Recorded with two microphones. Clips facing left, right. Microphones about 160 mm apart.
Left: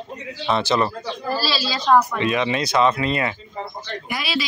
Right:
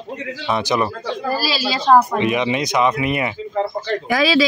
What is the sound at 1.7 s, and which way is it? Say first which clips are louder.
Speech: right 4 dB; 30° right (ahead or behind).